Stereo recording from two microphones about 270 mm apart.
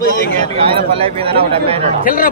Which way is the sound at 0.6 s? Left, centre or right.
Right.